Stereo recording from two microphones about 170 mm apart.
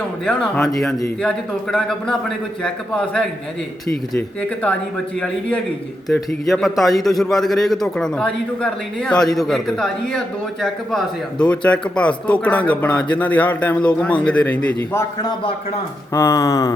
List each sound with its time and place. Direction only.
0.3 s a man's voice: 5° left (ahead or behind)
6.5 s a man's voice: centre (ahead or behind)
16.1 s a sound: 20° left (ahead or behind)